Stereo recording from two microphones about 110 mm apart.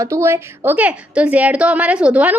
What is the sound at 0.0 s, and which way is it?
A woman's voice, 25° right (ahead or behind).